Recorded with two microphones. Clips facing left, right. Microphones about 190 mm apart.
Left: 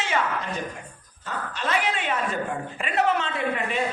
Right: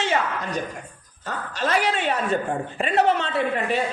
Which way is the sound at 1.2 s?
40° right (ahead or behind).